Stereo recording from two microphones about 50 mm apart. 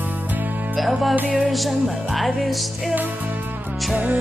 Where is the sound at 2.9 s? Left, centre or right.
Right.